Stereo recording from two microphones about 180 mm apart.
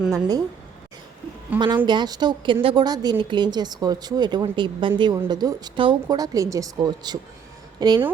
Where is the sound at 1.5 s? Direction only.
25° right (ahead or behind).